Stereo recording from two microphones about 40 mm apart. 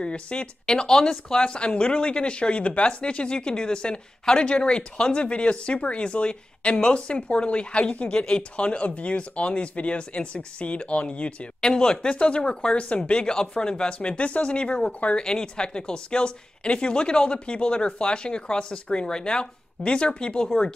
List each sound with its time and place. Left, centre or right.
0.0 s speech: left
15.1 s speech: centre